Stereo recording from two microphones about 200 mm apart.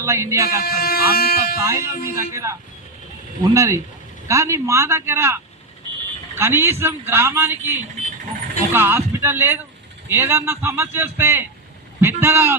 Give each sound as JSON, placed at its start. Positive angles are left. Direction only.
{"t": 0.0, "sound": "a man's voice", "side_deg": -15}
{"t": 0.6, "sound": "speech", "side_deg": 50}
{"t": 1.5, "sound": "a man's voice", "side_deg": -15}